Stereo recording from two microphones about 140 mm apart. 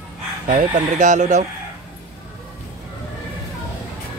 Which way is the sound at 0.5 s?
65° right (ahead or behind).